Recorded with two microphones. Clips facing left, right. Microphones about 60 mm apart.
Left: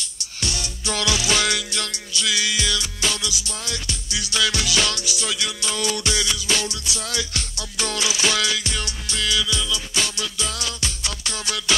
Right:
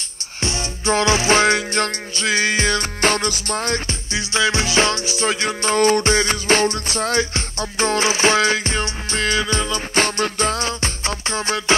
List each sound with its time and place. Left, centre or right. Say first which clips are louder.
0.4 s music: right 5 dB; right